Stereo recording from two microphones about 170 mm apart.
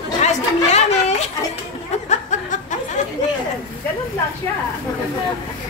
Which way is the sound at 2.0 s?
45° left (ahead or behind).